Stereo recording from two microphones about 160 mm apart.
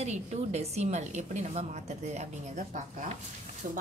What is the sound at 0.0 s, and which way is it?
A woman's voice, 45° right (ahead or behind).